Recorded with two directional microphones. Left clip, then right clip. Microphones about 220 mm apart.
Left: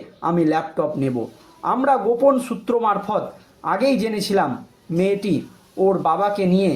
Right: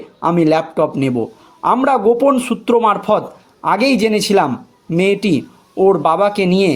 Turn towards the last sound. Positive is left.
turn(degrees=-40)  # may be behind; listen again after turning